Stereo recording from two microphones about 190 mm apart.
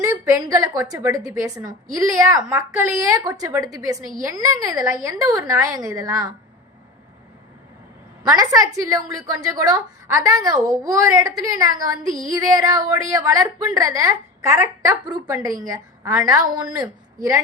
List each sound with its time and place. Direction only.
0.0 s a woman's voice: 15° right (ahead or behind)
8.3 s a woman's voice: 20° right (ahead or behind)